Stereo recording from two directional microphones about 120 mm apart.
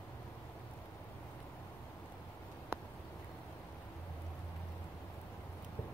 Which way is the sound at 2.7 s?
20° right (ahead or behind).